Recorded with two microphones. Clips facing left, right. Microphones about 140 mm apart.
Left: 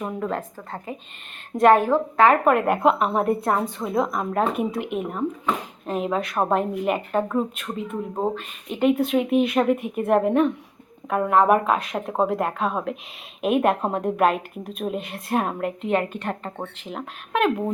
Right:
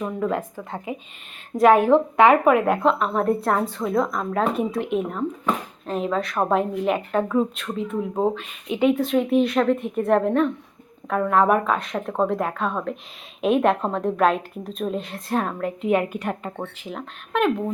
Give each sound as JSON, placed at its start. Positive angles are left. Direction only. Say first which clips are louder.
{"t": 0.9, "sound": "speech", "louder": "right 3 dB", "side_deg": -10}
{"t": 1.9, "sound": "speech", "louder": "right 3 dB", "side_deg": -20}
{"t": 2.3, "sound": "speech", "louder": "right 2 dB", "side_deg": 0}
{"t": 2.8, "sound": "a woman's voice", "louder": "left 1 dB", "side_deg": 10}
{"t": 15.6, "sound": "speech", "louder": "right 2 dB", "side_deg": -5}